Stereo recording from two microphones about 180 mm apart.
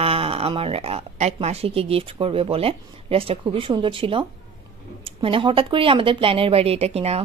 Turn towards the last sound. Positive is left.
turn(degrees=-35)  # may be behind; listen again after turning